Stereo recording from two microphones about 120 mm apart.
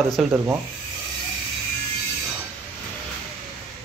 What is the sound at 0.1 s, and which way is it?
Rub, 5° right (ahead or behind).